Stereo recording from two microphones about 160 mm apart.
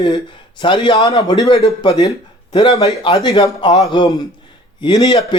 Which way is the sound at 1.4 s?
40° left (ahead or behind).